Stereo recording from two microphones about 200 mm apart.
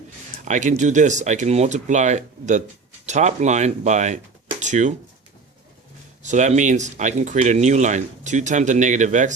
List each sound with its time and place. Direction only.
0.4 s speech: 40° right (ahead or behind)
6.2 s speech: 35° right (ahead or behind)